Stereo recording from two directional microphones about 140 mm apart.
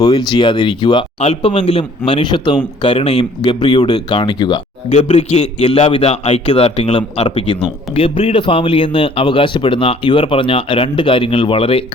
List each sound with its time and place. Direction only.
0.0 s speech: 30° left (ahead or behind); by 7.3 s 45° left (ahead or behind)
7.3 s speech: 35° left (ahead or behind)